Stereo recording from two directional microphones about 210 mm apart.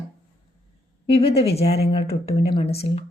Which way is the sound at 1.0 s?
30° left (ahead or behind).